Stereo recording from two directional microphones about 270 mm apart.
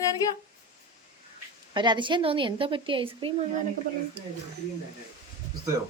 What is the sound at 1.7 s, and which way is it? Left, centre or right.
A woman's voice, centre.